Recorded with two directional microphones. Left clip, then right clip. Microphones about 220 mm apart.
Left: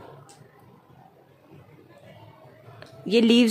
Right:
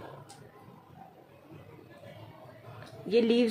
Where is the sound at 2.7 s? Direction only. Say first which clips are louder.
Left 5 dB; 50° left (ahead or behind).